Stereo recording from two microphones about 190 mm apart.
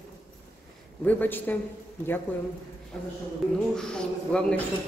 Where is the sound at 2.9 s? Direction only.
5° left (ahead or behind).